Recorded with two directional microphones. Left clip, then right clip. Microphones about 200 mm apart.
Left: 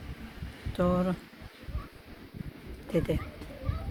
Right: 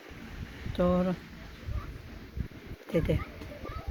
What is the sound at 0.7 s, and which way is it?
Speech, centre (ahead or behind).